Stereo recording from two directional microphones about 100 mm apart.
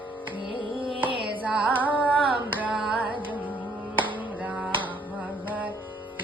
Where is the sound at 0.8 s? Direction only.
60° right (ahead or behind).